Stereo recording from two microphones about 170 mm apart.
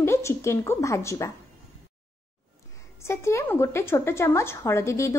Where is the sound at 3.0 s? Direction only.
15° left (ahead or behind).